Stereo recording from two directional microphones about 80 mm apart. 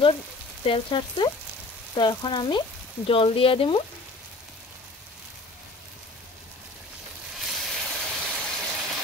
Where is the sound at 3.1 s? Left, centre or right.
Left.